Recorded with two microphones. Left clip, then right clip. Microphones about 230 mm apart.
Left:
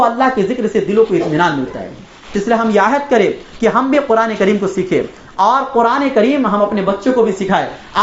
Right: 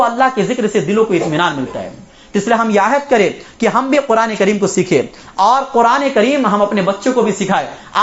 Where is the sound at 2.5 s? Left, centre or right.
Right.